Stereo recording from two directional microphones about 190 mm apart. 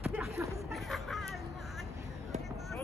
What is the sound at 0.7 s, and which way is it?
Vehicle, centre (ahead or behind).